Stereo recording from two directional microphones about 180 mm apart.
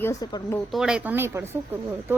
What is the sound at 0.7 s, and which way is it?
Speech, 5° right (ahead or behind).